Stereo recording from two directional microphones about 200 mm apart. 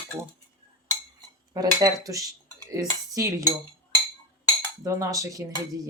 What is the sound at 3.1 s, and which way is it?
Cutlery, 15° right (ahead or behind).